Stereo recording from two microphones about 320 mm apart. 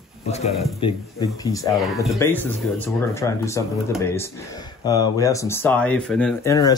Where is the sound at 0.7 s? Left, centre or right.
Centre.